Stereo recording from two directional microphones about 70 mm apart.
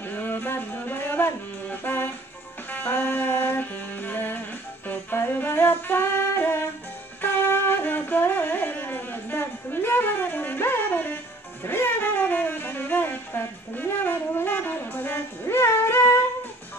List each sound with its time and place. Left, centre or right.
0.0 s music: left
11.6 s speech: left